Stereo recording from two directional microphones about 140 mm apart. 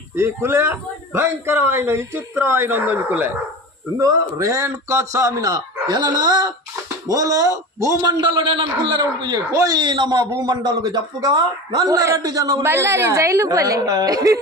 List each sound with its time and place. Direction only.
0.1 s a man's voice: 15° right (ahead or behind)